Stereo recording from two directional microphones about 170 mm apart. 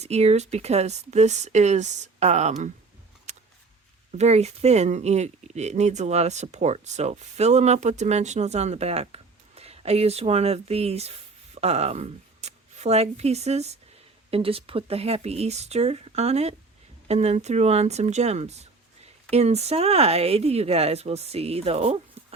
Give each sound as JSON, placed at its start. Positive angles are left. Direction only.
{"t": 0.0, "sound": "speech", "side_deg": -40}
{"t": 4.2, "sound": "speech", "side_deg": -40}